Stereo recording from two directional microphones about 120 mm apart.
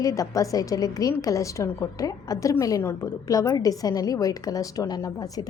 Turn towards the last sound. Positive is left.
turn(degrees=30)  # may be behind; listen again after turning